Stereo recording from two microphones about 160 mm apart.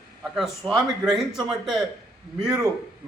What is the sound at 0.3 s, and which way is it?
A man's voice, centre (ahead or behind).